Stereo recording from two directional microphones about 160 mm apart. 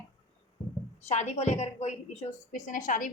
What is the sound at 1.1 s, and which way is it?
A woman's voice, 45° left (ahead or behind).